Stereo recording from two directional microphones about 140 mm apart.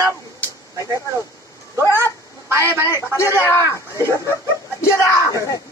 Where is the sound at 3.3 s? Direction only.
20° left (ahead or behind).